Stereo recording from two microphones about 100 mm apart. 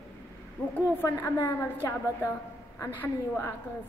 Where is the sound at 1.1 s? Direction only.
30° left (ahead or behind).